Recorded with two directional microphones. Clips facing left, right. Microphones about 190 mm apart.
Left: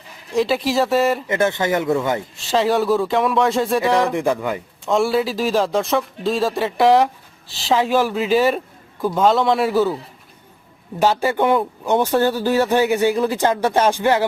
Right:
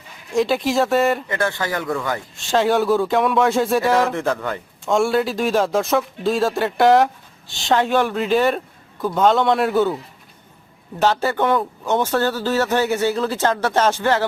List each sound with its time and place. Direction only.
0.3 s speech: centre (ahead or behind)
1.3 s speech: 20° left (ahead or behind)
2.3 s speech: centre (ahead or behind)
4.1 s speech: 15° left (ahead or behind)
11.0 s speech: 10° left (ahead or behind)